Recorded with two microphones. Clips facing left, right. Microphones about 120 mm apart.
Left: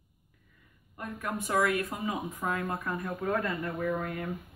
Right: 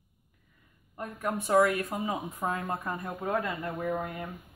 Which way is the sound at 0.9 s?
25° right (ahead or behind).